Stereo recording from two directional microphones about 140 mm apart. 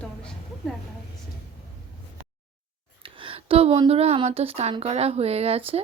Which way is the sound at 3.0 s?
40° right (ahead or behind).